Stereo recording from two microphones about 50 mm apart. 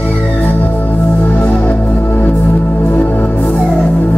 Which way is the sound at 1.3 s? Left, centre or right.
Left.